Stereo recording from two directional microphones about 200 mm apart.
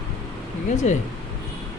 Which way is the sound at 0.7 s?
35° left (ahead or behind).